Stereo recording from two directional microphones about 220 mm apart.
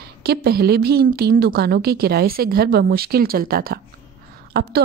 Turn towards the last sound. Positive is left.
turn(degrees=-45)  # may be behind; listen again after turning